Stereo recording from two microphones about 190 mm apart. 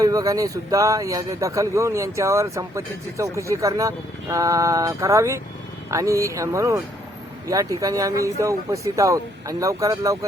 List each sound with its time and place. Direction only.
0.0 s speech: 20° right (ahead or behind)